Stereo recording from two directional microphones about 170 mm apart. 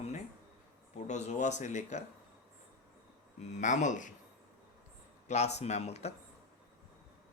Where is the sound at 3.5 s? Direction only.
45° left (ahead or behind).